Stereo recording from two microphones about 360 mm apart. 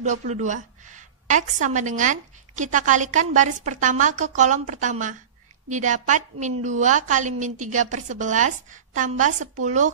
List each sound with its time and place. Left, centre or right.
0.0 s a woman's voice: centre